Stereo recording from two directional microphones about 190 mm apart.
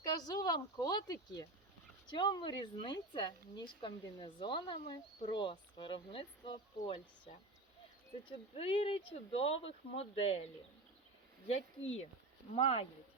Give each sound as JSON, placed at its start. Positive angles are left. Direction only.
{"t": 0.0, "sound": "speech", "side_deg": 20}
{"t": 12.5, "sound": "speech", "side_deg": 30}